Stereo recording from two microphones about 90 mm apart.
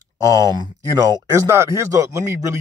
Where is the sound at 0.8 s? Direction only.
35° right (ahead or behind).